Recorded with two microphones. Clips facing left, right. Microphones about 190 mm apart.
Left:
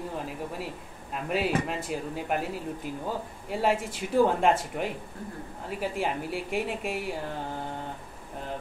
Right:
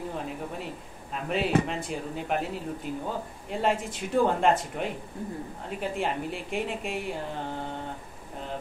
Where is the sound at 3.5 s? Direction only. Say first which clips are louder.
Left 1 dB; 5° left (ahead or behind).